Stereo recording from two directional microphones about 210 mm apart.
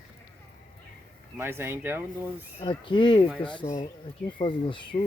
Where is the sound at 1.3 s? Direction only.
10° right (ahead or behind).